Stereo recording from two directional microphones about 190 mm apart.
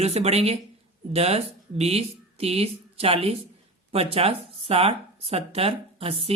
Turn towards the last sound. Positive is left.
turn(degrees=-30)  # may be behind; listen again after turning